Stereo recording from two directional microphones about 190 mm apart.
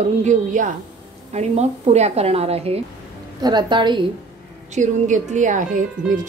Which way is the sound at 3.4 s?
20° right (ahead or behind).